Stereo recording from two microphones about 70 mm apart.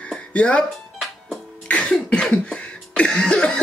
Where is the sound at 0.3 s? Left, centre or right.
Centre.